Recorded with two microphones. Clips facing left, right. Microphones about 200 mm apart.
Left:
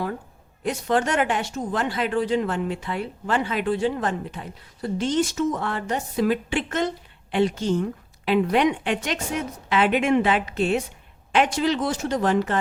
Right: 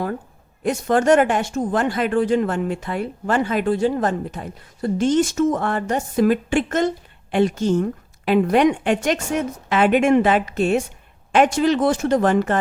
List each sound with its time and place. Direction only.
0.6 s speech: 45° right (ahead or behind)